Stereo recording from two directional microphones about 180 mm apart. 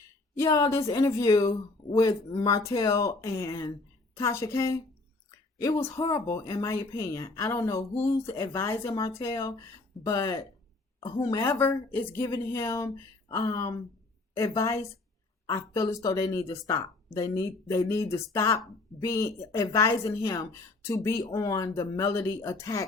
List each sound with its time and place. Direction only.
0.3 s a woman's voice: 15° left (ahead or behind)